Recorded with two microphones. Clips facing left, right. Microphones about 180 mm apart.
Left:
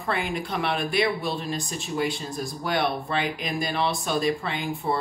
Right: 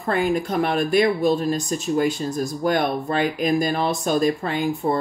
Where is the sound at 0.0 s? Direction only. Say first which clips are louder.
Right 7 dB; 45° right (ahead or behind).